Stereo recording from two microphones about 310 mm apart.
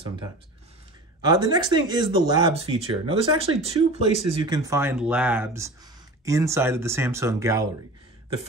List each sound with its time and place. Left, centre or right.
1.2 s speech: centre